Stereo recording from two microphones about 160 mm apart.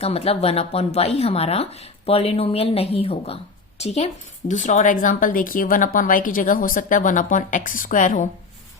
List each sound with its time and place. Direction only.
0.0 s speech: 40° left (ahead or behind)